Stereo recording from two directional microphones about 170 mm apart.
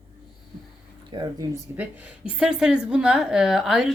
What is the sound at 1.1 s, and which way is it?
Speech, 25° right (ahead or behind).